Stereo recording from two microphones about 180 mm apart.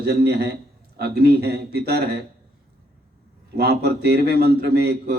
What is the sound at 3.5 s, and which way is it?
Speech, 60° right (ahead or behind).